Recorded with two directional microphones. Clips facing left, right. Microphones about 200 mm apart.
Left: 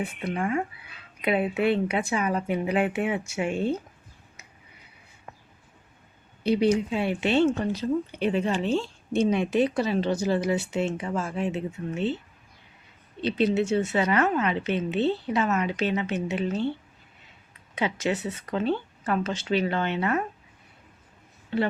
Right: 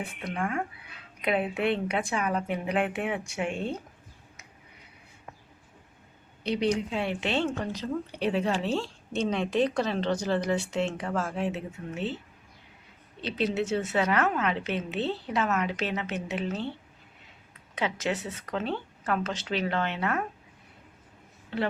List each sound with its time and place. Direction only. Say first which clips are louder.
0.3 s speech: left 3 dB; 10° left (ahead or behind)
6.4 s speech: left 5 dB; 5° left (ahead or behind)
13.2 s speech: left 5 dB; centre (ahead or behind)
17.7 s speech: left 3 dB; centre (ahead or behind)